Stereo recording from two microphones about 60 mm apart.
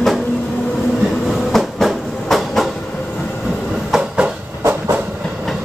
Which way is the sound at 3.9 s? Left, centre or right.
Centre.